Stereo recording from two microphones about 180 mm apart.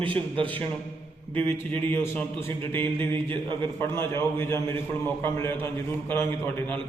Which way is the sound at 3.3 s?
30° right (ahead or behind).